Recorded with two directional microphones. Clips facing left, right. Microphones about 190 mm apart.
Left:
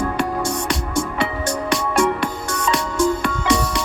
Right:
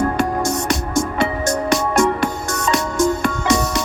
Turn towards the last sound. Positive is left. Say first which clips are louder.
# right 2 dB
turn(degrees=-45)  # may be behind; listen again after turning